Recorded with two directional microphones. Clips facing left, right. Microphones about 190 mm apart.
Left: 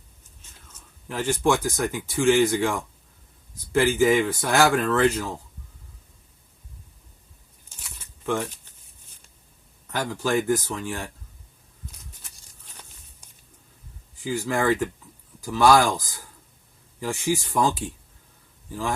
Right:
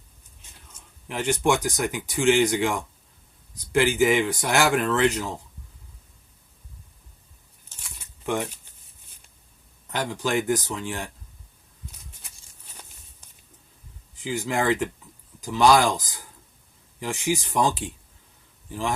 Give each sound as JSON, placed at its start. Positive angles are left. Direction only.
{"t": 0.7, "sound": "speech", "side_deg": -15}
{"t": 8.3, "sound": "speech", "side_deg": -15}
{"t": 9.9, "sound": "speech", "side_deg": -20}
{"t": 14.2, "sound": "a man's voice", "side_deg": -20}